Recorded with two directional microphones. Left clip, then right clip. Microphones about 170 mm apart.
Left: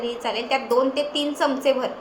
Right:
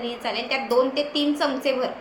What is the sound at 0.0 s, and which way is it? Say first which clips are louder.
A woman's voice: left 2 dB; 10° left (ahead or behind).